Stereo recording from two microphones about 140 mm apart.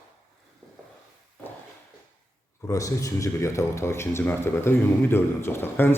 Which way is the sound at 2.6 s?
25° left (ahead or behind).